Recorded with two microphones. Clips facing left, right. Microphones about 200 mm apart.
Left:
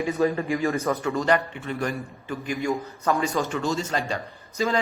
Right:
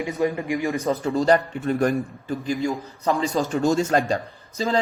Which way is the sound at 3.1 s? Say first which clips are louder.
Right 2 dB; 30° right (ahead or behind).